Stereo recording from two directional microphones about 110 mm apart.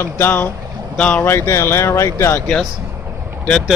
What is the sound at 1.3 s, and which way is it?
Speech, 25° left (ahead or behind).